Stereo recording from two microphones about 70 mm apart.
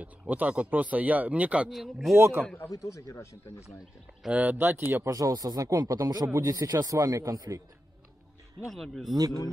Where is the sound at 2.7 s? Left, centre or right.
Left.